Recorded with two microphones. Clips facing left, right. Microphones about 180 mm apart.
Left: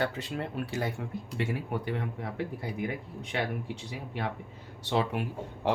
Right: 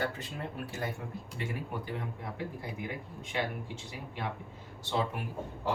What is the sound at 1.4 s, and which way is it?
Speech, 70° left (ahead or behind).